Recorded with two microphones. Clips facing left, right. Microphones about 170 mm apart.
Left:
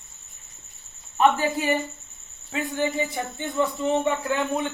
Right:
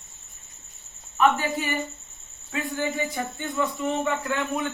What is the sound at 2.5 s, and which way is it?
Speech, 20° left (ahead or behind).